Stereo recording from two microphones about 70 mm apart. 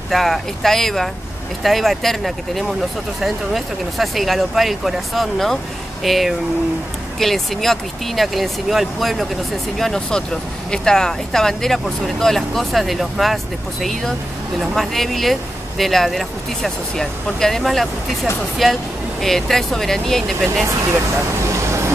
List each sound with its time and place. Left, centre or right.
0.1 s speech: centre
20.6 s speech: right